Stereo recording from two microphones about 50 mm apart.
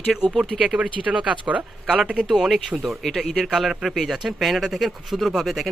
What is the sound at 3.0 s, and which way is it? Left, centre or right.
Speech, centre.